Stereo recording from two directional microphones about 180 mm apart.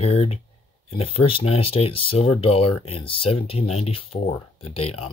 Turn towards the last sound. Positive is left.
turn(degrees=35)  # may be behind; listen again after turning